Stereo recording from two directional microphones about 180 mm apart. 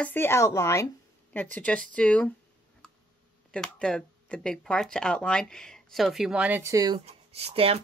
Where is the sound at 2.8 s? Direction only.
5° left (ahead or behind).